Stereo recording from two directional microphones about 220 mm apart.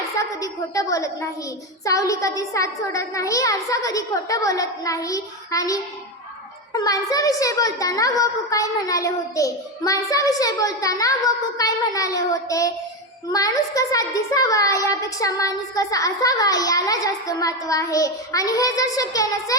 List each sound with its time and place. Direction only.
0.2 s a woman's voice: 15° left (ahead or behind)